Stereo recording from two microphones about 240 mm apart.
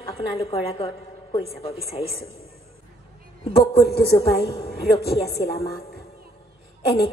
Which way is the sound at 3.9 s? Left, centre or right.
Left.